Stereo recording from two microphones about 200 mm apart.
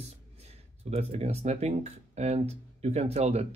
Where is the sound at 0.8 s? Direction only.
30° right (ahead or behind).